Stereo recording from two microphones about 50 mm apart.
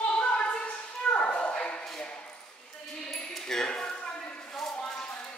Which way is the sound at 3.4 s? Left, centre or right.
Centre.